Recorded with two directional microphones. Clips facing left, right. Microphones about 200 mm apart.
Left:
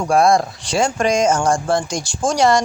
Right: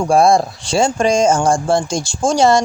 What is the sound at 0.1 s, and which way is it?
Speech, 30° right (ahead or behind).